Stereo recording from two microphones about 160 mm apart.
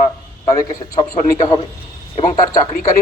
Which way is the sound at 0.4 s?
20° left (ahead or behind).